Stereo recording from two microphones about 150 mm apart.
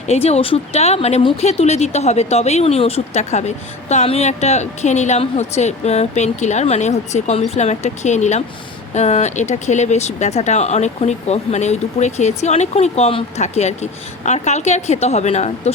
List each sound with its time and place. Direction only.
0.1 s speech: 45° left (ahead or behind)